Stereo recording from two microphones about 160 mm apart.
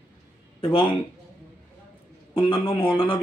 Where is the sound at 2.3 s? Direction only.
35° left (ahead or behind).